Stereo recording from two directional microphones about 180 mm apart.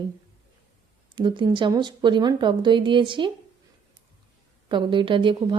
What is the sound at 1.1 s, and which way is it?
Speech, 25° right (ahead or behind).